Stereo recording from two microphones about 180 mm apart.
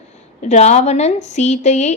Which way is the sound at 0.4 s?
40° left (ahead or behind).